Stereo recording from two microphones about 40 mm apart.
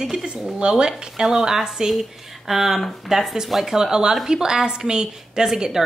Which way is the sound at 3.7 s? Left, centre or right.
Centre.